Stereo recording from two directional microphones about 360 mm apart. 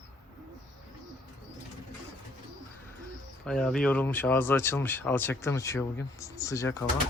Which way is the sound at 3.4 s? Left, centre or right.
Centre.